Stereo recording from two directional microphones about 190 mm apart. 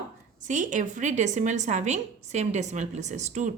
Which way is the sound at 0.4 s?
40° right (ahead or behind).